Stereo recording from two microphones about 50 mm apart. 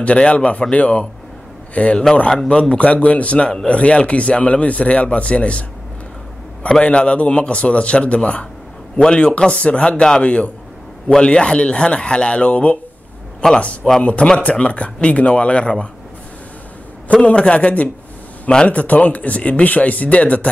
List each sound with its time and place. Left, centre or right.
0.0 s a man's voice: left
6.8 s speech: left
14.0 s speech: centre
17.1 s speech: left